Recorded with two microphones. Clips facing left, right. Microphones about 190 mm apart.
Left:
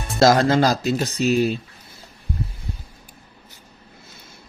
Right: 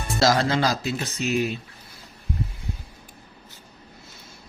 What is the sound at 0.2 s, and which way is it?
Speech, 50° left (ahead or behind).